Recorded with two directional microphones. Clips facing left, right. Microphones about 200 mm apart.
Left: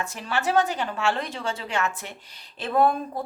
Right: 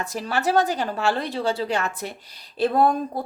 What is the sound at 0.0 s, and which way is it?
A woman's voice, 35° right (ahead or behind).